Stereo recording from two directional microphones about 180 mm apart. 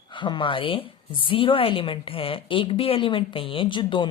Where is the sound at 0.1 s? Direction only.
25° left (ahead or behind).